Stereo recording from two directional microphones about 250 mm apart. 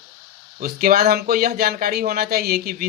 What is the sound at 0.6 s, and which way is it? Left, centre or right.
Speech, right.